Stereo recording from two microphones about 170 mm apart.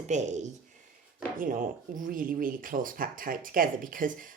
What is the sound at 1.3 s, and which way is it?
Speech, 55° right (ahead or behind).